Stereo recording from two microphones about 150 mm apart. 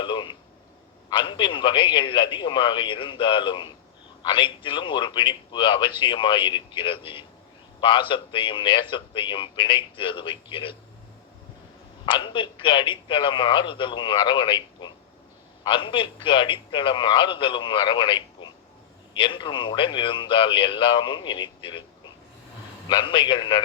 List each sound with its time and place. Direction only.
0.0 s a sound: 30° left (ahead or behind)
1.1 s a man's voice: 30° left (ahead or behind)
12.0 s a man's voice: 35° left (ahead or behind)
22.9 s a man's voice: 30° left (ahead or behind)